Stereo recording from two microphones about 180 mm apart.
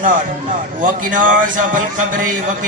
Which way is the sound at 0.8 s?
45° right (ahead or behind).